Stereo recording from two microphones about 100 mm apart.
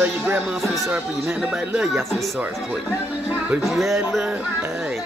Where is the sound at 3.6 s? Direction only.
Centre (ahead or behind).